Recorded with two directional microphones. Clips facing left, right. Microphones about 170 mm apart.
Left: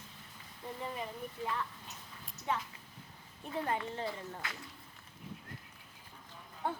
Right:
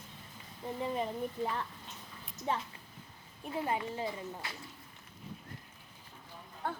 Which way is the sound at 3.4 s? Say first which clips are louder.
Right 1 dB; 15° right (ahead or behind).